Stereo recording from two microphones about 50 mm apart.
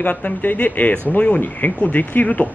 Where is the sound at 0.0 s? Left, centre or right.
Left.